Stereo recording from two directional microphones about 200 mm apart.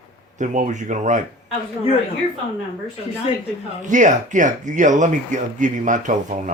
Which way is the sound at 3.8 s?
40° right (ahead or behind).